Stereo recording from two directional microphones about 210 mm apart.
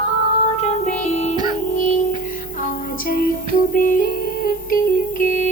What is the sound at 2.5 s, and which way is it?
Music, 40° left (ahead or behind).